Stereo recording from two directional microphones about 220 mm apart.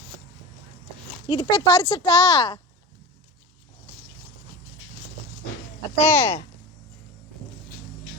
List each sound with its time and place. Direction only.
1.3 s speech: 20° left (ahead or behind)
6.0 s speech: 10° left (ahead or behind)